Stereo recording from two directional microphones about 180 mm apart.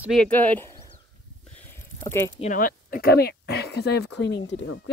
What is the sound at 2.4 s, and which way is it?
Speech, 45° left (ahead or behind).